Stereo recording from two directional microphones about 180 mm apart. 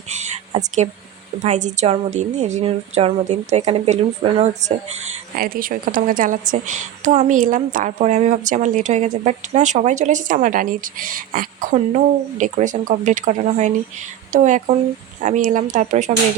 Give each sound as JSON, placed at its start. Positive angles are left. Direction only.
{"t": 0.8, "sound": "a woman's voice", "side_deg": -30}
{"t": 1.4, "sound": "a woman's voice", "side_deg": -40}
{"t": 5.4, "sound": "a woman's voice", "side_deg": -50}